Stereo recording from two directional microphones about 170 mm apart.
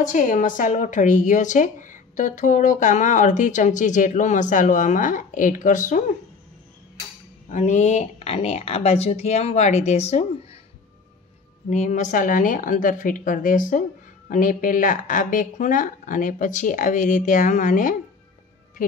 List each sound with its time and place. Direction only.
0.1 s speech: 45° left (ahead or behind)
7.4 s speech: 45° left (ahead or behind)
11.7 s speech: 45° left (ahead or behind)